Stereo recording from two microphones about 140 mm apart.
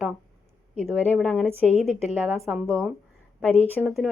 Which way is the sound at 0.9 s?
10° right (ahead or behind).